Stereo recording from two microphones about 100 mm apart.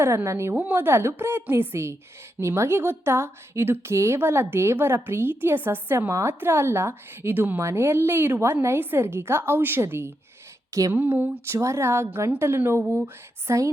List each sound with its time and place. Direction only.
0.0 s a woman's voice: 25° right (ahead or behind)
13.5 s a woman's voice: 30° right (ahead or behind)